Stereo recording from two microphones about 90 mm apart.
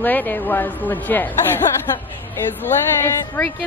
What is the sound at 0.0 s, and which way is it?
Speech, 20° left (ahead or behind).